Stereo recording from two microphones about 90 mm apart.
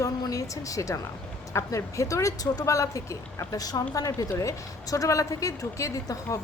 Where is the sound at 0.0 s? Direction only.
40° left (ahead or behind).